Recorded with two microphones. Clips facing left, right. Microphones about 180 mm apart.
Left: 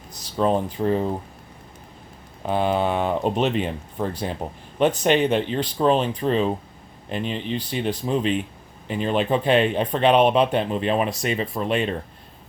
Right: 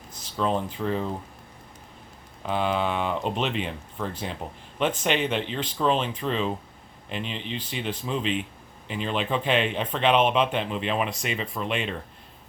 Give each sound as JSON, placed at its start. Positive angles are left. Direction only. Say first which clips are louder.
{"t": 0.1, "sound": "speech", "louder": "left 5 dB", "side_deg": 40}
{"t": 2.4, "sound": "speech", "louder": "left 4 dB", "side_deg": 45}